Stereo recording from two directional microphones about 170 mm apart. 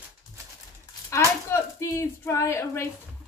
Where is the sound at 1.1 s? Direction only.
15° left (ahead or behind).